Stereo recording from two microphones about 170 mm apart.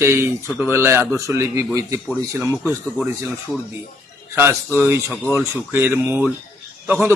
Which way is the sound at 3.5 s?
5° left (ahead or behind).